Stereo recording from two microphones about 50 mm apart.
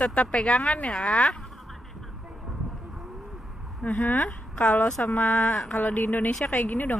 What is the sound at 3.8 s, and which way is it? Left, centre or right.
Speech, left.